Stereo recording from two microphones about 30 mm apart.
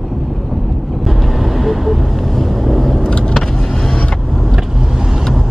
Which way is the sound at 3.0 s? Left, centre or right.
Left.